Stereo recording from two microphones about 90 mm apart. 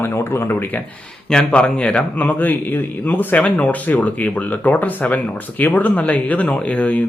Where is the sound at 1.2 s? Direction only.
10° left (ahead or behind).